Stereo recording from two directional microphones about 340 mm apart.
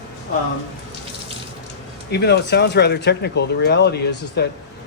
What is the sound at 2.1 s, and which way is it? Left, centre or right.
Speech, left.